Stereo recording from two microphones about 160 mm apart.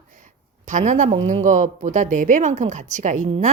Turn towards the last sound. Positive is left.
turn(degrees=-50)  # may be behind; listen again after turning